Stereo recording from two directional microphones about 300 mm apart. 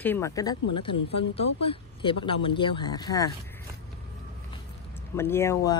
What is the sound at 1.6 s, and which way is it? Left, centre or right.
Speech, centre.